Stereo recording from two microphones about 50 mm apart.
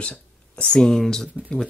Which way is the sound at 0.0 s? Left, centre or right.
Left.